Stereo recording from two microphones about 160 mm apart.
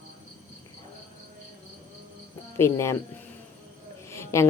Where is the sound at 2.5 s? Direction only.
15° left (ahead or behind).